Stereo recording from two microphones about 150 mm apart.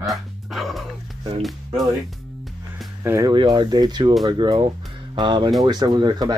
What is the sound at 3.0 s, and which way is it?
Speech, 20° right (ahead or behind).